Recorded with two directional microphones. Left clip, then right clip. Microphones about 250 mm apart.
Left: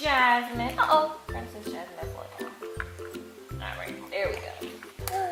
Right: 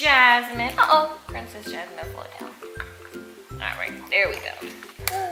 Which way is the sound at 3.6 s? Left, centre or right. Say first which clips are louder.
Right 8 dB; centre.